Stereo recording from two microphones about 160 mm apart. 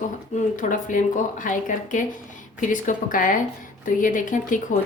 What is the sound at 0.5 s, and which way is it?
Speech, 55° left (ahead or behind).